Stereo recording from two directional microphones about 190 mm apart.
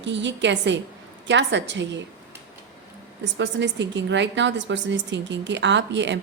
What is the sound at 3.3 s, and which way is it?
A woman's voice, 70° right (ahead or behind).